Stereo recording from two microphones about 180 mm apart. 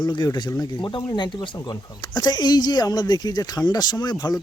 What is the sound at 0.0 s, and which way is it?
Speech, 25° left (ahead or behind).